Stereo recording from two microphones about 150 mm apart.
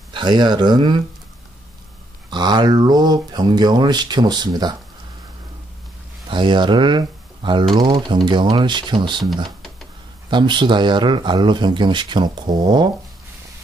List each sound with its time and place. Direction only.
0.1 s speech: 30° right (ahead or behind)
2.3 s speech: 30° right (ahead or behind)
6.2 s speech: 30° right (ahead or behind)
10.3 s speech: 30° right (ahead or behind)